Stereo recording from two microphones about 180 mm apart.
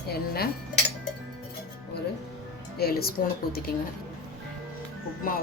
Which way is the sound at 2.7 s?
60° left (ahead or behind).